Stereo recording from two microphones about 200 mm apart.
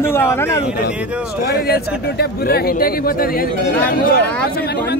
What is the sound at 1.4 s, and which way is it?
Speech, 50° left (ahead or behind).